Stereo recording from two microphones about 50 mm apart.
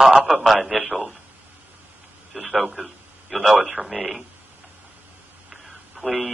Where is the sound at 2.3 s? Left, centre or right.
Centre.